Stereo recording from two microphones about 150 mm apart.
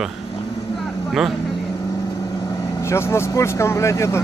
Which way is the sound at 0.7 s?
Centre (ahead or behind).